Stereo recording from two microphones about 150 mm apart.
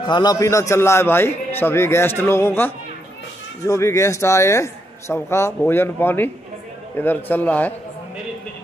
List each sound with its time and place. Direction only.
0.0 s a man's voice: 30° left (ahead or behind); by 7.7 s 10° left (ahead or behind)